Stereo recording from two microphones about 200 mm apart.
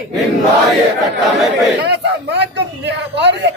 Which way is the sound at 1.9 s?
60° right (ahead or behind).